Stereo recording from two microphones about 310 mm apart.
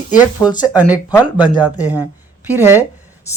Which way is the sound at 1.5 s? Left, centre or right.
Centre.